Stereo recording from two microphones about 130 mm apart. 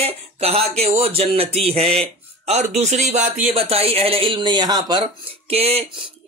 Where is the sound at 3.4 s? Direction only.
50° right (ahead or behind); by 5.0 s 35° right (ahead or behind).